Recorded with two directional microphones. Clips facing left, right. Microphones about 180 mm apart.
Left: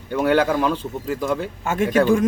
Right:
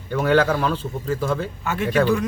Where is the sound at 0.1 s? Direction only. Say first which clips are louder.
Even; 10° left (ahead or behind).